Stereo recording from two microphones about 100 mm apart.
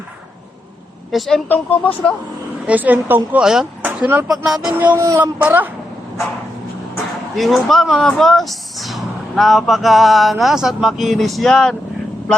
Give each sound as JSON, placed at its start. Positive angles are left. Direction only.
{"t": 1.1, "sound": "speech", "side_deg": 0}
{"t": 1.8, "sound": "speech", "side_deg": 15}
{"t": 2.6, "sound": "a woman's voice", "side_deg": -15}
{"t": 3.4, "sound": "speech", "side_deg": -5}
{"t": 4.0, "sound": "speech", "side_deg": -20}
{"t": 4.3, "sound": "speech", "side_deg": -5}
{"t": 4.7, "sound": "a woman's voice", "side_deg": -15}
{"t": 4.9, "sound": "speech", "side_deg": -30}
{"t": 5.2, "sound": "a woman's voice", "side_deg": -15}
{"t": 7.3, "sound": "speech", "side_deg": 0}